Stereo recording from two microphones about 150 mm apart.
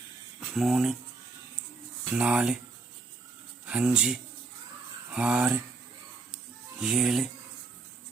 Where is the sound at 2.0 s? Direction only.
10° right (ahead or behind).